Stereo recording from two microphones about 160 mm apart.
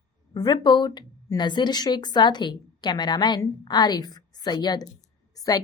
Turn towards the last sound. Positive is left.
turn(degrees=20)  # may be behind; listen again after turning